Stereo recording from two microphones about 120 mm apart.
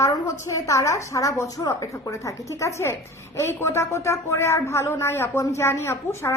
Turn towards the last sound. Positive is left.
turn(degrees=20)  # may be behind; listen again after turning